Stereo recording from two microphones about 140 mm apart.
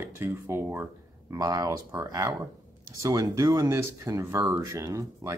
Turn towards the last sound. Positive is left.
turn(degrees=-20)  # may be behind; listen again after turning